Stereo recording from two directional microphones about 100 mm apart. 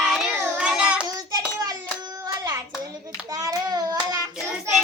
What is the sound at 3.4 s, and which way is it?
Hands, 40° right (ahead or behind).